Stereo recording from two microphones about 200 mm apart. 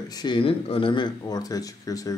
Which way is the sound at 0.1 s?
20° left (ahead or behind).